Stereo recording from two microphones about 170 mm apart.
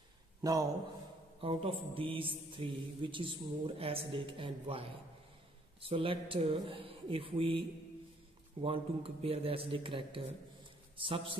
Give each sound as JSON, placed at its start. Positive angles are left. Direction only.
{"t": 0.4, "sound": "speech", "side_deg": -20}
{"t": 1.4, "sound": "a man's voice", "side_deg": -30}